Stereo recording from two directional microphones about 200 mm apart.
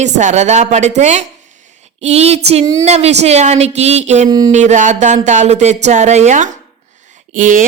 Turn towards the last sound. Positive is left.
turn(degrees=-40)  # may be behind; listen again after turning